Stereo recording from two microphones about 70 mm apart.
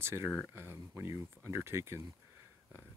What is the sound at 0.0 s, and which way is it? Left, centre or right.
Speech, right.